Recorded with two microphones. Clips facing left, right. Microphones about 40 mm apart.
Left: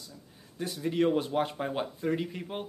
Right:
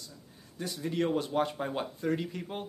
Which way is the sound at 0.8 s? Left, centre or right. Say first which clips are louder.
Left 3 dB; centre.